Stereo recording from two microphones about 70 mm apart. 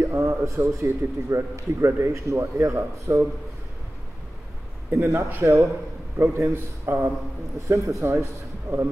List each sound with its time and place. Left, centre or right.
0.0 s a man's voice: right
4.9 s a man's voice: right
7.6 s speech: right